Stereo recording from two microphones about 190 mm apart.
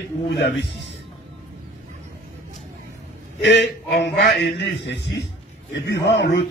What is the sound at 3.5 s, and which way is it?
A man's voice, 65° left (ahead or behind).